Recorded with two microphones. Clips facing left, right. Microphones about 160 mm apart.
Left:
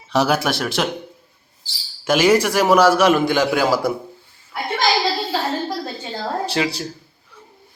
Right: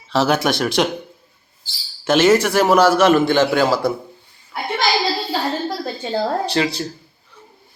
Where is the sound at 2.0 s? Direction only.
10° left (ahead or behind).